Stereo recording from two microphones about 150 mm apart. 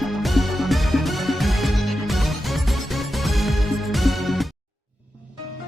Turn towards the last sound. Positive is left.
turn(degrees=0)  # may be behind; listen again after turning